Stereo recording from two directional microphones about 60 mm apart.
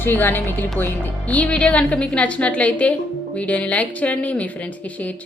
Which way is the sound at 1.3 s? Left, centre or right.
Left.